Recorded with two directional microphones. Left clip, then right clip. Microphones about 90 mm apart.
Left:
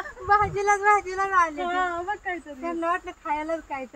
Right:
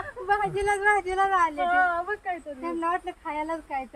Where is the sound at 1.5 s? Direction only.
40° right (ahead or behind).